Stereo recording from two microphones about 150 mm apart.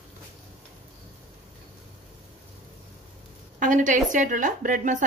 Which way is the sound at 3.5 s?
60° right (ahead or behind).